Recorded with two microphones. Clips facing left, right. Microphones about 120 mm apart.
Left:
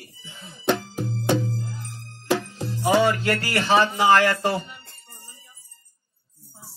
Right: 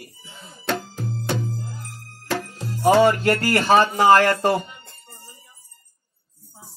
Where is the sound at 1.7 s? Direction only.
45° right (ahead or behind).